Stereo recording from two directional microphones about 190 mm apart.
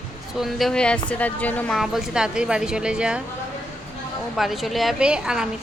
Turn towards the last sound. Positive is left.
turn(degrees=-5)  # may be behind; listen again after turning